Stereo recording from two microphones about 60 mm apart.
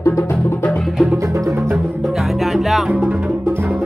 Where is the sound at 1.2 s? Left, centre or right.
Right.